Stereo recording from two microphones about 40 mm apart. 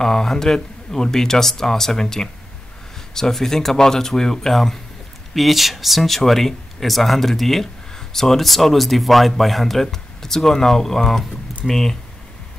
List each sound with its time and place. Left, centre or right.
0.0 s speech: centre
5.3 s speech: centre